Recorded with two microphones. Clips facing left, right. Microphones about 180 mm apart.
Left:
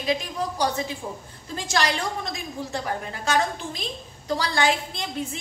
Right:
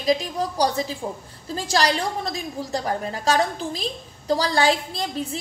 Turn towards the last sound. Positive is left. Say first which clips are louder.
# right 3 dB
turn(degrees=-35)  # may be behind; listen again after turning